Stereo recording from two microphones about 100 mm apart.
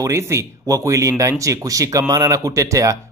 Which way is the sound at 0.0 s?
30° right (ahead or behind).